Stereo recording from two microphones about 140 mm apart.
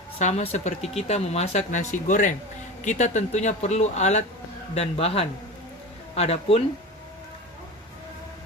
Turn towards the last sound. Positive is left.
turn(degrees=45)  # may be behind; listen again after turning